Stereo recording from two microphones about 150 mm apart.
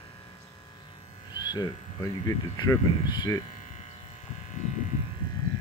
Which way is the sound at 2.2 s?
25° left (ahead or behind).